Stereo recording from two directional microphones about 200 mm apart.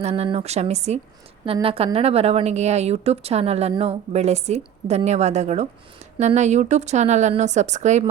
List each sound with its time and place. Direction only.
0.0 s a woman's voice: 30° right (ahead or behind)